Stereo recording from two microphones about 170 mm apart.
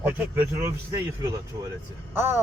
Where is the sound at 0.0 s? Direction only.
10° right (ahead or behind).